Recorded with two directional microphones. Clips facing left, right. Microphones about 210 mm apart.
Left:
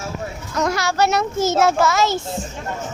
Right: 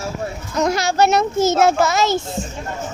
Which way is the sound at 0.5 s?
20° right (ahead or behind).